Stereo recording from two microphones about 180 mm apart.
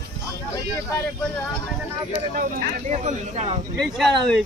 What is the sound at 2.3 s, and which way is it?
Speech, 50° right (ahead or behind).